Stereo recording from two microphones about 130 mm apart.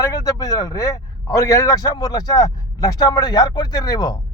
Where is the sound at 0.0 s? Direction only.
25° left (ahead or behind).